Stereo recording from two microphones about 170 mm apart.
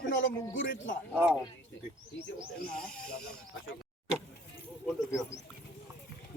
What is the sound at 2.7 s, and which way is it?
Speech, 5° left (ahead or behind).